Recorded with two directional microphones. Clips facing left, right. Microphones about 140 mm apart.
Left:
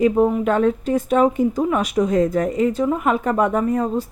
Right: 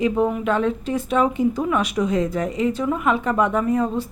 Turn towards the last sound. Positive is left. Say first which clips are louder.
# left 1 dB
turn(degrees=45)  # may be behind; listen again after turning